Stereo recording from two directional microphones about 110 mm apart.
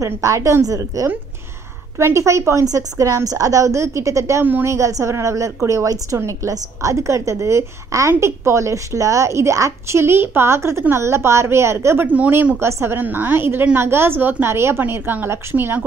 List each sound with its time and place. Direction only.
0.0 s a woman's voice: 30° right (ahead or behind)
4.5 s a woman's voice: 15° right (ahead or behind)
4.7 s a woman's voice: 30° right (ahead or behind)